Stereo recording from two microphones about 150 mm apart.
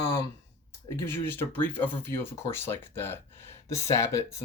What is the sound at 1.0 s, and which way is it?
Speech, 15° left (ahead or behind).